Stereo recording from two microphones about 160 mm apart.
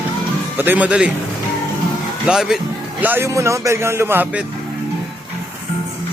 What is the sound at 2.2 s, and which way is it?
Speech, 5° right (ahead or behind).